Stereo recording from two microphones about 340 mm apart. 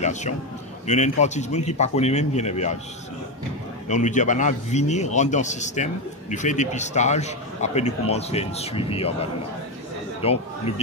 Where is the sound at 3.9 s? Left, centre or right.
Left.